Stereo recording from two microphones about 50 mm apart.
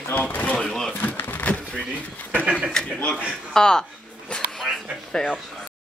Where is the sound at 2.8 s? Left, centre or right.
Centre.